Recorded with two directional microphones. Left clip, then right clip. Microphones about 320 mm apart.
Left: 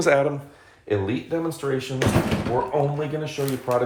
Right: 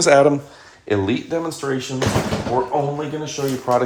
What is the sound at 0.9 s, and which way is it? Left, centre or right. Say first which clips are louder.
Speech: right 4 dB; right.